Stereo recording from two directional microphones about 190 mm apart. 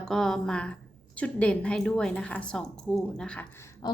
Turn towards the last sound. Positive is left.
turn(degrees=20)  # may be behind; listen again after turning